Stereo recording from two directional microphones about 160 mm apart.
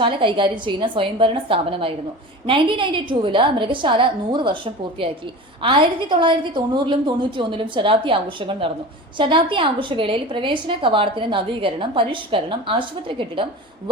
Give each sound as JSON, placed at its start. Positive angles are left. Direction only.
{"t": 0.0, "sound": "a woman's voice", "side_deg": -30}